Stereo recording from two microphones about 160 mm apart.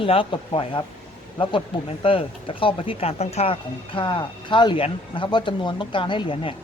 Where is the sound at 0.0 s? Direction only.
35° left (ahead or behind).